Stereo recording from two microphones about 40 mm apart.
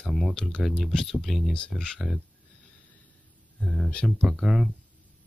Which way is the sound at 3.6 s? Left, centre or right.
Centre.